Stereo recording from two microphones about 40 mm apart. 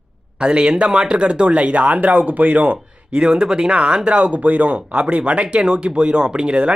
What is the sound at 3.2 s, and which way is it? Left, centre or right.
Speech, right.